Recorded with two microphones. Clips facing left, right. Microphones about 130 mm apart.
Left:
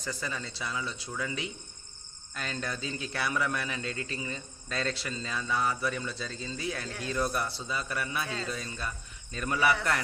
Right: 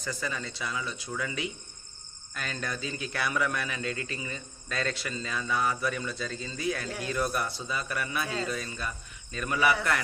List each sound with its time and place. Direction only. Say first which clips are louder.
0.0 s a man's voice: right 2 dB; 30° left (ahead or behind)
8.2 s a man's voice: right 3 dB; 5° right (ahead or behind)
8.4 s a man's voice: right 2 dB; 30° left (ahead or behind)